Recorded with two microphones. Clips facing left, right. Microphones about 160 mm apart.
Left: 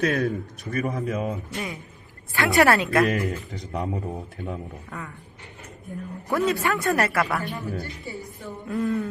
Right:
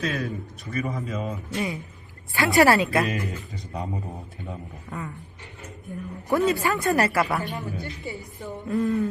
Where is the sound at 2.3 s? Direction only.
Centre (ahead or behind).